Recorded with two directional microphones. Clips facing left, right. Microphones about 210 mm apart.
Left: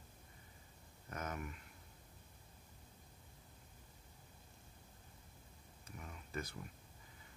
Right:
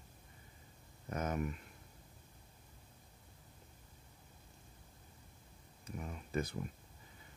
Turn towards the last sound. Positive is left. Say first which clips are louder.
# right 7 dB
turn(degrees=-20)  # may be behind; listen again after turning